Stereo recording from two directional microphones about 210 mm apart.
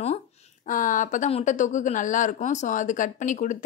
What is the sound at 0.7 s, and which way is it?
A woman's voice, 40° left (ahead or behind).